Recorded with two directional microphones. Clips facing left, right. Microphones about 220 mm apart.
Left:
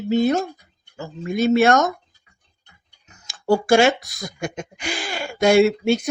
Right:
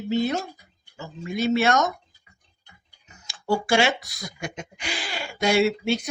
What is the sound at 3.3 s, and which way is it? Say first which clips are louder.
Speech: left 6 dB; 45° left (ahead or behind).